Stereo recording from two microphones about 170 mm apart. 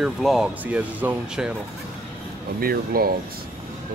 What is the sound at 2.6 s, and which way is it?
Speech, 60° right (ahead or behind).